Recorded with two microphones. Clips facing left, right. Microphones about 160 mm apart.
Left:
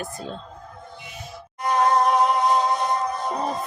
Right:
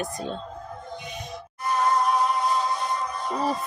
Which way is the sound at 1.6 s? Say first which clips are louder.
Left 4 dB; 75° left (ahead or behind).